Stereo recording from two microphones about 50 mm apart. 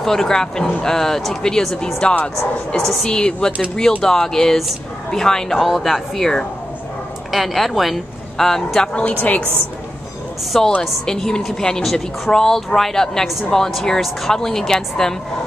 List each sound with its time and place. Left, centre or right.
0.0 s speech: centre
2.0 s a woman's voice: left
2.7 s speech: centre
3.1 s a woman's voice: centre
5.7 s a woman's voice: centre
8.9 s a woman's voice: left
10.8 s speech: centre